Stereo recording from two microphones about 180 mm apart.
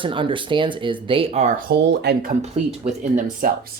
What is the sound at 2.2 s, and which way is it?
Speech, 40° right (ahead or behind).